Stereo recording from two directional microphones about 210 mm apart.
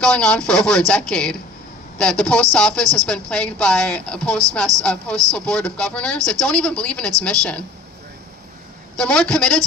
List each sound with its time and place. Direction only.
0.0 s speech: 5° left (ahead or behind)
5.1 s speech: 15° right (ahead or behind)
5.5 s speech: 5° left (ahead or behind)
9.0 s speech: 5° left (ahead or behind)